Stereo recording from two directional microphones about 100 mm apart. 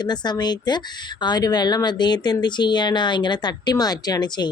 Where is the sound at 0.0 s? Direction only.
45° left (ahead or behind).